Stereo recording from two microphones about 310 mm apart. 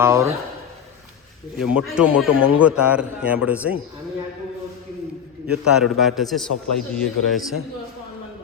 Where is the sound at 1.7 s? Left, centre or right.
Centre.